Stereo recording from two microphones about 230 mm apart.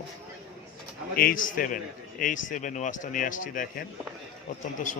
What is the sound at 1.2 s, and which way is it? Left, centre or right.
A man's voice, left.